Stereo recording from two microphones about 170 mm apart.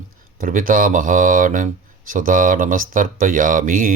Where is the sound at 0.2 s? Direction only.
55° right (ahead or behind).